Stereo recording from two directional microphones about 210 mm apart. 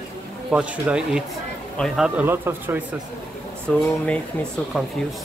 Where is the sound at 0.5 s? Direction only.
5° right (ahead or behind).